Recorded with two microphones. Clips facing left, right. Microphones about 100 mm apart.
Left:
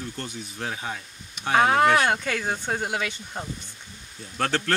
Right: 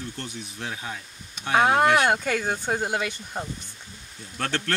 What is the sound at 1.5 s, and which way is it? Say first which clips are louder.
Speech: even; 15° right (ahead or behind).